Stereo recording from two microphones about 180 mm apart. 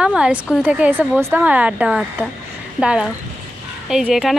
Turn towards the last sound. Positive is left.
turn(degrees=-5)  # may be behind; listen again after turning